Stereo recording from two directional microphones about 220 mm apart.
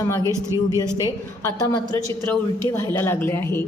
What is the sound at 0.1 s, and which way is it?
A woman's voice, 15° left (ahead or behind).